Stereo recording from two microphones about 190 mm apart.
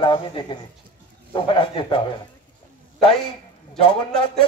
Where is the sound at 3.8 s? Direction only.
30° left (ahead or behind).